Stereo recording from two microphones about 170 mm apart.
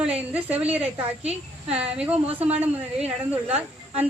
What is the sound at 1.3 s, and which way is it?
Speech, 35° right (ahead or behind).